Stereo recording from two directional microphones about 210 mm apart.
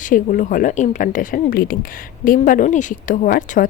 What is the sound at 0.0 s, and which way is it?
A woman's voice, 40° left (ahead or behind).